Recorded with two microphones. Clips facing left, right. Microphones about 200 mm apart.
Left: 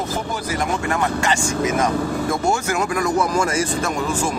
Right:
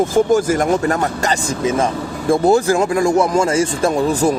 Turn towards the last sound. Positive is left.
turn(degrees=-25)  # may be behind; listen again after turning